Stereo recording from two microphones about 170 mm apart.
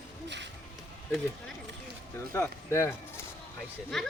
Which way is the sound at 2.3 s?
15° left (ahead or behind).